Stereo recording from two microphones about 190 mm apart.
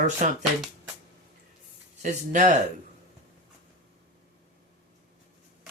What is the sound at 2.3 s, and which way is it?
Speech, 40° right (ahead or behind).